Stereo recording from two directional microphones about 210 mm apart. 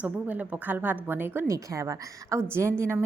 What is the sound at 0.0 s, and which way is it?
A woman's voice, 5° right (ahead or behind).